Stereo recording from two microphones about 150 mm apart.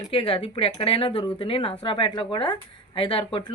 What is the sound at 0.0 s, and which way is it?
A woman's voice, 35° left (ahead or behind).